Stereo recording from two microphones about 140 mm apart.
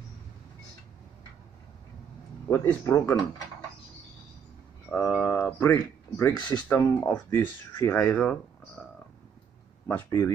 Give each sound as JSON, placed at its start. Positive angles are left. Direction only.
{"t": 2.5, "sound": "speech", "side_deg": 20}
{"t": 4.8, "sound": "a sound", "side_deg": 10}
{"t": 6.8, "sound": "speech", "side_deg": 15}
{"t": 9.8, "sound": "speech", "side_deg": 20}